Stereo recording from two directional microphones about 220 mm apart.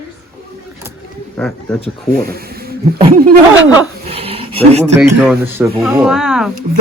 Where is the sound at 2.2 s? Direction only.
45° right (ahead or behind).